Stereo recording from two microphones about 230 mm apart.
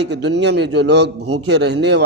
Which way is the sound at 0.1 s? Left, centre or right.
Right.